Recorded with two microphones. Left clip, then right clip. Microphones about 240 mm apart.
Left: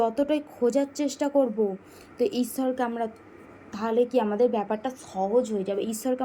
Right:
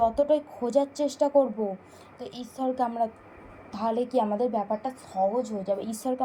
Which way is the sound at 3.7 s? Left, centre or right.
Centre.